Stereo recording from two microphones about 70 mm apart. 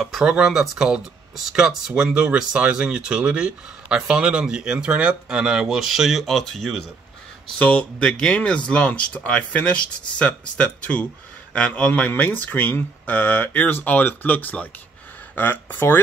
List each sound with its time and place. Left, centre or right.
0.0 s speech: centre
7.5 s speech: centre